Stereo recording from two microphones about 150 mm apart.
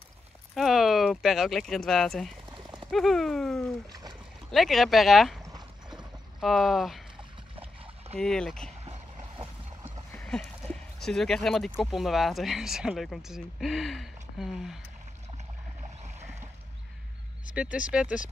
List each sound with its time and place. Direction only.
0.6 s speech: centre (ahead or behind)
5.4 s clip-clop: 25° right (ahead or behind)
6.4 s speech: centre (ahead or behind)
7.5 s a sound: 35° right (ahead or behind)
8.2 s speech: 5° left (ahead or behind)
9.4 s boat: 40° right (ahead or behind)
10.1 s a sound: 5° left (ahead or behind)
11.8 s speech: centre (ahead or behind)
15.3 s boat: 50° right (ahead or behind)
17.6 s speech: 10° right (ahead or behind)